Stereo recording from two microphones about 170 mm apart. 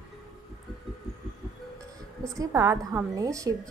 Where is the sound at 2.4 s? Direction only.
20° right (ahead or behind).